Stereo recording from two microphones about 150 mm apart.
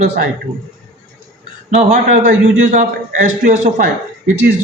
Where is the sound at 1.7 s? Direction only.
50° right (ahead or behind).